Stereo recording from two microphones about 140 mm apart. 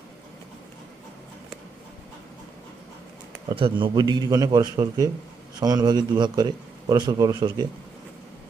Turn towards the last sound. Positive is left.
turn(degrees=-30)  # may be behind; listen again after turning